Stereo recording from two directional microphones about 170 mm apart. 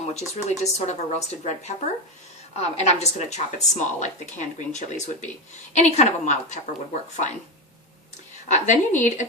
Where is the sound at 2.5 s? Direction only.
40° left (ahead or behind).